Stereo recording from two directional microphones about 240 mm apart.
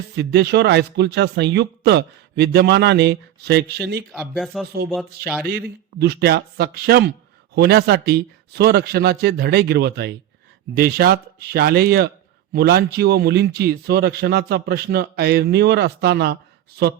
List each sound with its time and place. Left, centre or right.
0.2 s a man's voice: right
4.1 s speech: centre
5.5 s a man's voice: right